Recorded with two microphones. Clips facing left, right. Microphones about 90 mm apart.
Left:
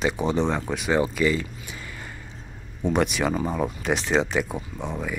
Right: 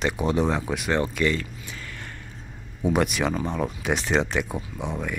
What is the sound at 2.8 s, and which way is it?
Speech, 5° right (ahead or behind).